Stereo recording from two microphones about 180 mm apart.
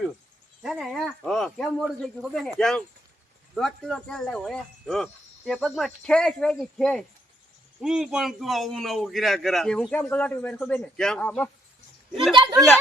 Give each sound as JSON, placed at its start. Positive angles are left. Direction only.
{"t": 0.6, "sound": "a man's voice", "side_deg": 0}
{"t": 12.3, "sound": "speech", "side_deg": -25}